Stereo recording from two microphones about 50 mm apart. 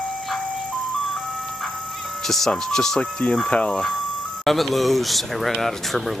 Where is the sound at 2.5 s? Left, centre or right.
Centre.